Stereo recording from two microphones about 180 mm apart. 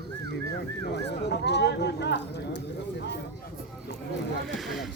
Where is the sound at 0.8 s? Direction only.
70° left (ahead or behind).